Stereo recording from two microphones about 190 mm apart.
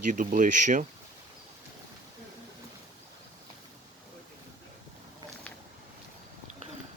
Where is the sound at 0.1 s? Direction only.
45° right (ahead or behind).